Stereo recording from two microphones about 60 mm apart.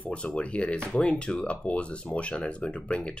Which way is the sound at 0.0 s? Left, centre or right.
Centre.